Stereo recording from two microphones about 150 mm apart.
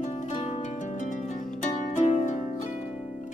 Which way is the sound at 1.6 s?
50° left (ahead or behind).